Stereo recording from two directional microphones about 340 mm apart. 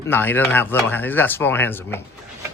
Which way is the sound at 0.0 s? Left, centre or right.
Centre.